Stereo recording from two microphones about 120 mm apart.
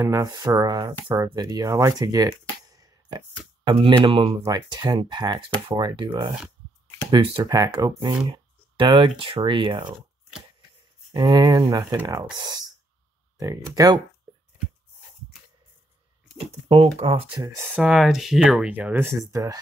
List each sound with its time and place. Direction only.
0.0 s speech: 25° right (ahead or behind)
2.7 s a sound: 30° right (ahead or behind)
3.6 s speech: 40° right (ahead or behind)
4.5 s speech: 35° right (ahead or behind)
11.1 s speech: 30° right (ahead or behind)
16.6 s speech: 50° right (ahead or behind)
17.4 s speech: 30° right (ahead or behind)
17.6 s speech: 5° right (ahead or behind)
19.3 s speech: 30° right (ahead or behind)